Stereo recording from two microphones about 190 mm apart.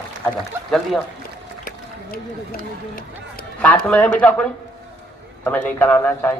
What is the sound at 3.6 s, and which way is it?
Speech, 5° left (ahead or behind).